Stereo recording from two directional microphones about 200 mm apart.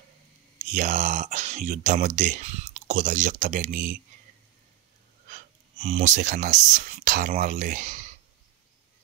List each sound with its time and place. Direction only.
0.6 s speech: 40° right (ahead or behind)
5.3 s speech: 35° right (ahead or behind)